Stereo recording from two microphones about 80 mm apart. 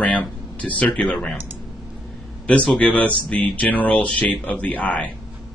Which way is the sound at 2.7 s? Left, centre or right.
Centre.